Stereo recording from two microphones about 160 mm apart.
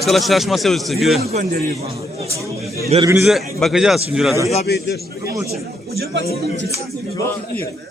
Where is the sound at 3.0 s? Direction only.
15° right (ahead or behind).